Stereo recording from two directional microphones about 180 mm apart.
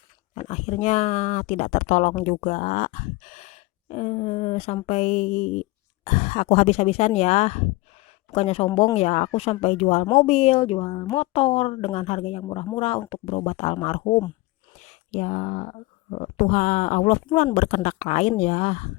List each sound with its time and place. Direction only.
0.3 s speech: 35° left (ahead or behind)
14.8 s speech: 40° left (ahead or behind)